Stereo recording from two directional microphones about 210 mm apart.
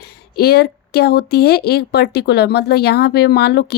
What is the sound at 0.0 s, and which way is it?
Speech, 50° left (ahead or behind).